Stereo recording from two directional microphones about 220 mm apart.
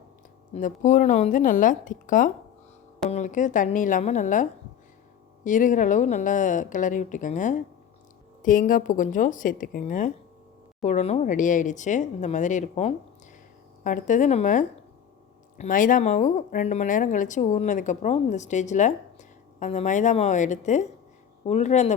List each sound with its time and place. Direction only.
0.5 s speech: 35° left (ahead or behind)